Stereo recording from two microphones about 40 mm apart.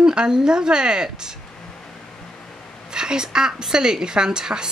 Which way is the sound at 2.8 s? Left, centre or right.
Centre.